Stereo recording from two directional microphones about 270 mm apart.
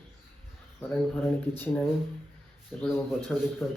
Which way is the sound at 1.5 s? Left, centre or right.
Centre.